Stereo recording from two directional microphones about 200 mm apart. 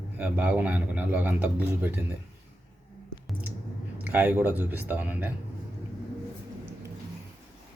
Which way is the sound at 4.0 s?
10° right (ahead or behind).